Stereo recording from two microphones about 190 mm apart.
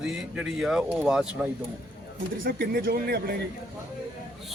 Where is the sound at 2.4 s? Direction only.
50° right (ahead or behind).